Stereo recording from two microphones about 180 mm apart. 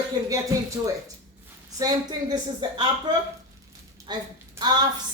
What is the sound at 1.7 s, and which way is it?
Speech, 20° right (ahead or behind).